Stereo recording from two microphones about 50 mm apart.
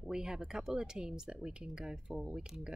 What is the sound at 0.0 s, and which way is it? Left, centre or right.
Speech, centre.